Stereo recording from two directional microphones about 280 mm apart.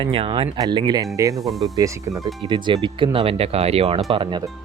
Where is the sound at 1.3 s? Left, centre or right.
Centre.